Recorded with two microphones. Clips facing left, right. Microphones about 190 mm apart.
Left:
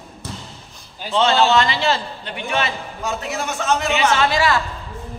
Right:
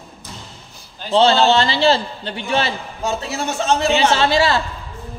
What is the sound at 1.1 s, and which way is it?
A man's voice, 30° right (ahead or behind).